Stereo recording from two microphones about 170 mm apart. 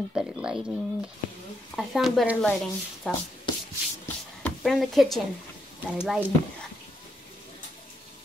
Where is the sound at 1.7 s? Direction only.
Centre (ahead or behind).